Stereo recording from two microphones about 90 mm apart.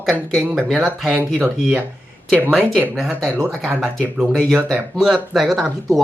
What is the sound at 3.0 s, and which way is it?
Speech, centre (ahead or behind).